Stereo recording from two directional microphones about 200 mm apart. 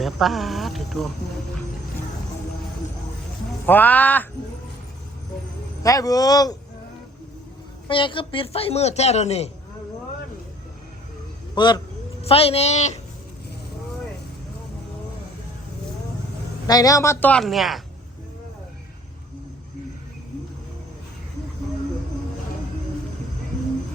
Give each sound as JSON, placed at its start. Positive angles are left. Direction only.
{"t": 0.0, "sound": "speech", "side_deg": 0}
{"t": 3.7, "sound": "a woman's voice", "side_deg": 10}
{"t": 5.8, "sound": "a woman's voice", "side_deg": 15}
{"t": 7.9, "sound": "a man's voice", "side_deg": 25}
{"t": 11.5, "sound": "a man's voice", "side_deg": 20}
{"t": 16.6, "sound": "a woman's voice", "side_deg": 20}